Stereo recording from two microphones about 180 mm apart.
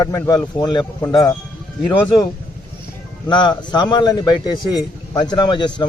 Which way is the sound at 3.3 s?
25° left (ahead or behind).